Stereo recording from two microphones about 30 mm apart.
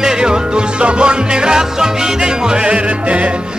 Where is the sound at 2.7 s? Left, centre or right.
Right.